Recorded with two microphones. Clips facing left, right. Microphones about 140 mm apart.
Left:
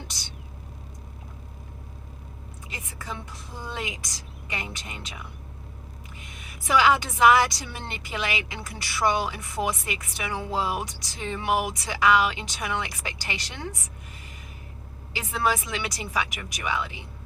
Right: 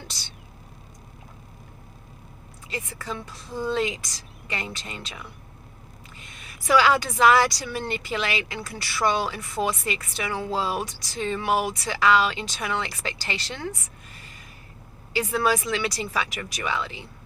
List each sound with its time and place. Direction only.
0.1 s speech: 15° left (ahead or behind)
2.6 s speech: 15° left (ahead or behind)